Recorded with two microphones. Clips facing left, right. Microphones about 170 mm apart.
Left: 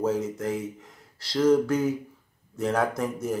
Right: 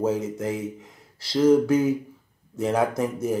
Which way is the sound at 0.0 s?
5° right (ahead or behind).